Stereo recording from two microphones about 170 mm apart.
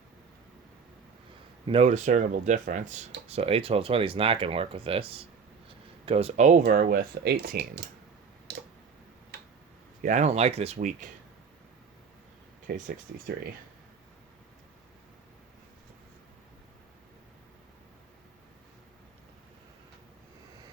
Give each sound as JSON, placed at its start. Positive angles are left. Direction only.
{"t": 1.6, "sound": "speech", "side_deg": -35}
{"t": 10.0, "sound": "speech", "side_deg": -45}
{"t": 12.7, "sound": "speech", "side_deg": -60}